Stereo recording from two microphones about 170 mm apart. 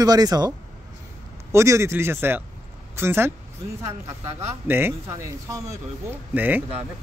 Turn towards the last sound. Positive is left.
turn(degrees=-10)  # may be behind; listen again after turning